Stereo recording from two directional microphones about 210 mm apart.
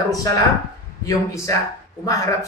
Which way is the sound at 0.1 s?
15° left (ahead or behind).